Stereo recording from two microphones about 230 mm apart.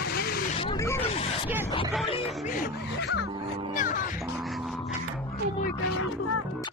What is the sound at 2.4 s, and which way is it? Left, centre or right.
Speech, left.